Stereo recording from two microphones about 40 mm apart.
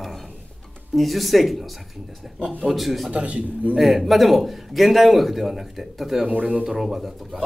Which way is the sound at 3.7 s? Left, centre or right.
Centre.